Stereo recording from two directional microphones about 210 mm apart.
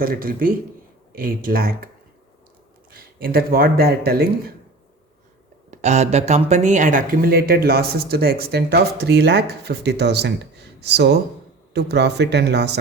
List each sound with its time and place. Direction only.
0.0 s speech: 45° right (ahead or behind)
2.9 s speech: 45° right (ahead or behind)
5.7 s speech: 35° right (ahead or behind); by 12.7 s 55° right (ahead or behind)